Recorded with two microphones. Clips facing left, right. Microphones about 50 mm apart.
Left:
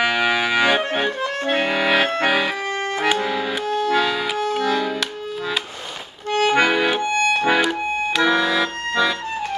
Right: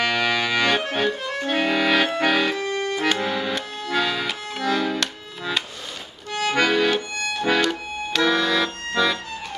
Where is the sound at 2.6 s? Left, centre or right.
Left.